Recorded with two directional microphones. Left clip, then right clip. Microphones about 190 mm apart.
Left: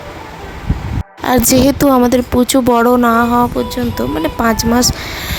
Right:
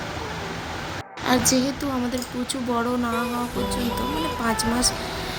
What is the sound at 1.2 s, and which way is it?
A woman's voice, 65° left (ahead or behind).